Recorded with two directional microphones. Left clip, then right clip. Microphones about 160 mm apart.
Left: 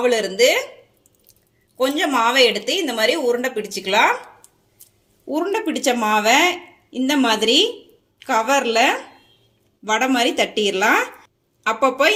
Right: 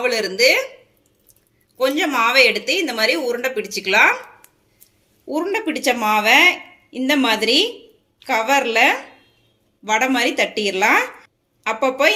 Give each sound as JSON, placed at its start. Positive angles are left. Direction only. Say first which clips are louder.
{"t": 0.0, "sound": "a woman's voice", "louder": "left 1 dB", "side_deg": 55}
{"t": 1.8, "sound": "a woman's voice", "louder": "even", "side_deg": 50}
{"t": 5.3, "sound": "a woman's voice", "louder": "even", "side_deg": 45}